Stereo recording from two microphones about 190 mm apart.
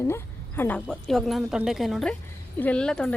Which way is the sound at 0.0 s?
15° left (ahead or behind).